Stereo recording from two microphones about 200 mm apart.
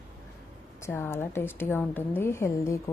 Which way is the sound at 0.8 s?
10° left (ahead or behind).